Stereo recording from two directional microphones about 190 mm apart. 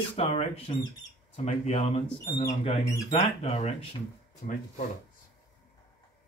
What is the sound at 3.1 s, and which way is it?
Speech, 35° left (ahead or behind).